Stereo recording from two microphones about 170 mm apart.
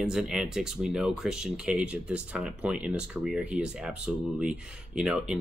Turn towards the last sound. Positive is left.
turn(degrees=-5)  # may be behind; listen again after turning